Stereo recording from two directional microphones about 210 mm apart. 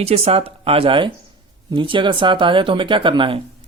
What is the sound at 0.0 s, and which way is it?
Speech, 30° right (ahead or behind).